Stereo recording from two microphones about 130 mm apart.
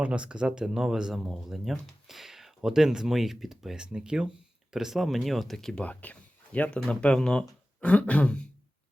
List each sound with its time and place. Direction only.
0.0 s speech: 10° right (ahead or behind); by 8.4 s 10° left (ahead or behind)